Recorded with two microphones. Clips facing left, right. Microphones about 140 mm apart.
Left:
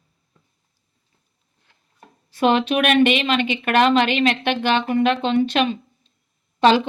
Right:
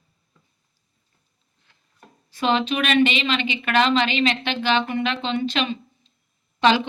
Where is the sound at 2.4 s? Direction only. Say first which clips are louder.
Left 4 dB; 55° left (ahead or behind).